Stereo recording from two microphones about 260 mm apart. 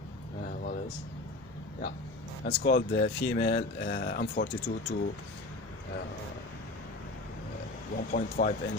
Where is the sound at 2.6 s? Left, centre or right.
Left.